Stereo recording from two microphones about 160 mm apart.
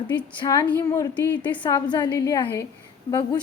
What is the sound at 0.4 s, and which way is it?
A woman's voice, 20° left (ahead or behind).